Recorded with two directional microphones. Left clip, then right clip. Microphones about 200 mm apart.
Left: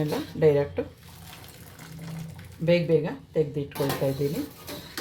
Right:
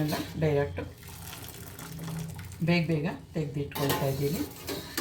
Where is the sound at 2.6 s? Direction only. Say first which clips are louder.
Left 8 dB; 45° left (ahead or behind).